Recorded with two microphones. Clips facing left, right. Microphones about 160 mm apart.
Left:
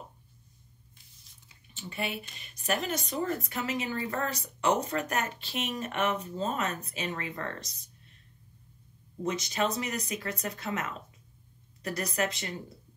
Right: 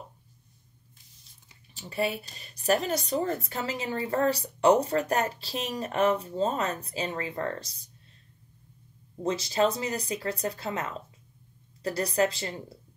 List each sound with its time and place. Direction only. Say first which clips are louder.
1.7 s speech: right 6 dB; 35° right (ahead or behind)
9.2 s speech: right 5 dB; 30° right (ahead or behind)